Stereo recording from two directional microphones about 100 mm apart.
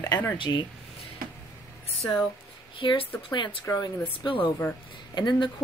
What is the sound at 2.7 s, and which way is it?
Speech, 60° left (ahead or behind).